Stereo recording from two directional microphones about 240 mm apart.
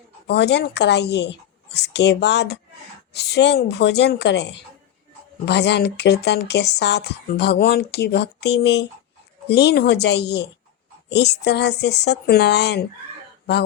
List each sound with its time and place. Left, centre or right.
0.3 s speech: left